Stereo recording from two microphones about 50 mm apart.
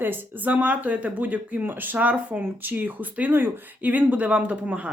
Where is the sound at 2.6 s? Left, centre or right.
Right.